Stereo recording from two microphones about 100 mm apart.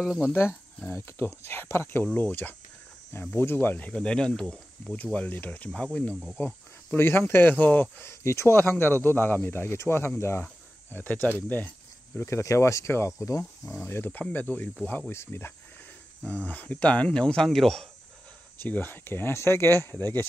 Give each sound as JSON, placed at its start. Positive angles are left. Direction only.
{"t": 0.0, "sound": "speech", "side_deg": -5}
{"t": 0.3, "sound": "speech", "side_deg": 25}
{"t": 5.7, "sound": "speech", "side_deg": 10}
{"t": 18.6, "sound": "speech", "side_deg": 20}